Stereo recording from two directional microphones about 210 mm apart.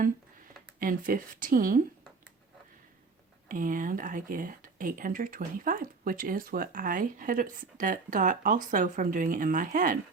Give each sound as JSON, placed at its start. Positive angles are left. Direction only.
{"t": 0.8, "sound": "speech", "side_deg": -40}
{"t": 3.5, "sound": "speech", "side_deg": -40}